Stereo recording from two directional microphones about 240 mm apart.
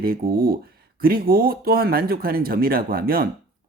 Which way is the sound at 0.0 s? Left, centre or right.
Right.